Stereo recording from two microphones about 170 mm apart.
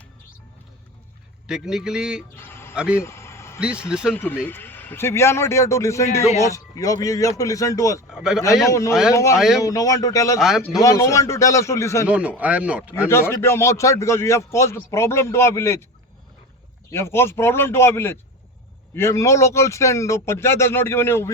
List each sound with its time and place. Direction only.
1.5 s speech: 5° right (ahead or behind)
2.3 s a sound: 15° left (ahead or behind)
2.7 s speech: 5° right (ahead or behind)
3.0 s vehicle: 15° left (ahead or behind)
3.8 s speech: 5° right (ahead or behind)
4.1 s a man's voice: 10° left (ahead or behind)
8.1 s a man's voice: 5° right (ahead or behind)
8.6 s a man's voice: 20° left (ahead or behind)
10.4 s speech: centre (ahead or behind)
10.8 s a man's voice: 20° left (ahead or behind)
12.0 s speech: 5° right (ahead or behind)
13.1 s a man's voice: 15° left (ahead or behind)
16.9 s a man's voice: 15° left (ahead or behind)